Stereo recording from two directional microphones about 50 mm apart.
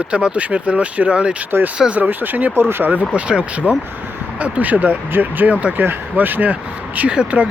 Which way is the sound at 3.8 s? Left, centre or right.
Right.